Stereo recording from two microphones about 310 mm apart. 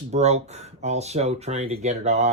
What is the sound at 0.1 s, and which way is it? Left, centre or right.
Speech, right.